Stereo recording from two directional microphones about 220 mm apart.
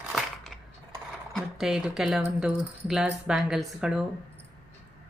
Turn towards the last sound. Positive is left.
turn(degrees=-5)  # may be behind; listen again after turning